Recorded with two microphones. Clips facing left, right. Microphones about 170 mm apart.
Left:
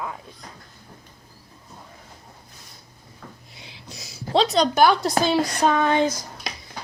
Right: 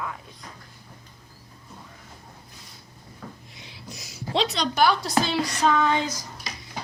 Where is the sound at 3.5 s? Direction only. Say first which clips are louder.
Even; 30° left (ahead or behind); by 5.9 s 50° left (ahead or behind).